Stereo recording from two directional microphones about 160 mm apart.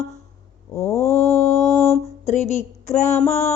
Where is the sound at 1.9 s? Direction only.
45° left (ahead or behind).